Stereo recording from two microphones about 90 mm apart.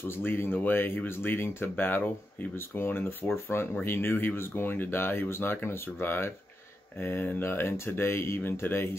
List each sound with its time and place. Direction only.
0.2 s speech: 25° left (ahead or behind)